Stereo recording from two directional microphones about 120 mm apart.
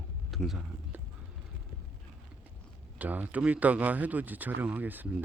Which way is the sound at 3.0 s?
10° right (ahead or behind).